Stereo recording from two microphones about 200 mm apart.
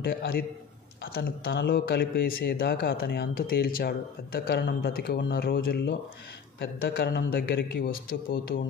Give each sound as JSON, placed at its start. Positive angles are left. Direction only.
{"t": 0.0, "sound": "speech", "side_deg": 50}